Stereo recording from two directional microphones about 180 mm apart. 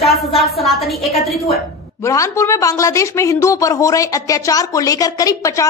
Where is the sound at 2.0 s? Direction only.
15° left (ahead or behind).